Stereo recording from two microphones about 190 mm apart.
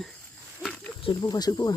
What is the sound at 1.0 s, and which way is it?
Speech, 25° left (ahead or behind).